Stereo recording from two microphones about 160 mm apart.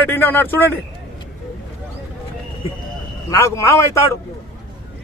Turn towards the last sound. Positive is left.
turn(degrees=20)  # may be behind; listen again after turning